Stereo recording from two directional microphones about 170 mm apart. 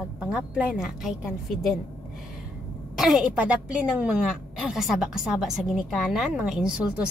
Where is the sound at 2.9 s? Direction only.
Centre (ahead or behind).